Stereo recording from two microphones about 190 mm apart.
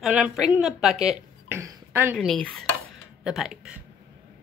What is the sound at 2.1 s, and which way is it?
Speech, 5° left (ahead or behind).